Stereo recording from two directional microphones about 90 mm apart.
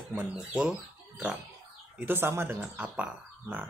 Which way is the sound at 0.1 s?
10° right (ahead or behind).